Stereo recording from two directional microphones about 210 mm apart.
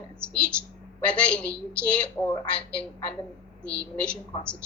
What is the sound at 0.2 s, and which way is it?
A woman's voice, 5° left (ahead or behind).